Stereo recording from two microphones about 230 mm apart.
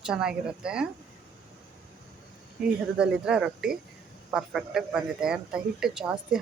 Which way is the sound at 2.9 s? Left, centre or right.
Centre.